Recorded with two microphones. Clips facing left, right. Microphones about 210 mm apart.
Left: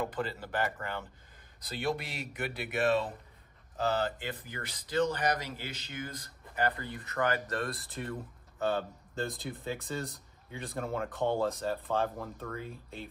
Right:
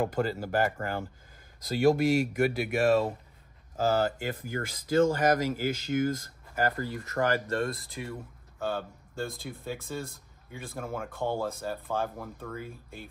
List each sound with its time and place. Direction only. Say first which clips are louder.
0.0 s speech: right 6 dB; 45° right (ahead or behind); by 7.7 s 30° right (ahead or behind)
7.9 s speech: even; 10° right (ahead or behind)